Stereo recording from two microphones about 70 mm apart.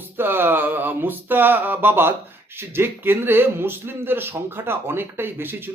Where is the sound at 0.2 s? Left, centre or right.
Right.